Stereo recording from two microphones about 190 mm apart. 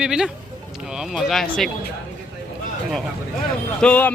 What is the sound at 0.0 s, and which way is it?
Speech, 5° right (ahead or behind).